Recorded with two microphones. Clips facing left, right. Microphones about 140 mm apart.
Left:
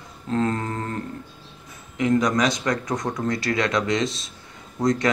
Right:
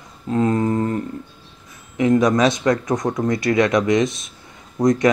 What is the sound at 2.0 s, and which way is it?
Speech, 20° right (ahead or behind).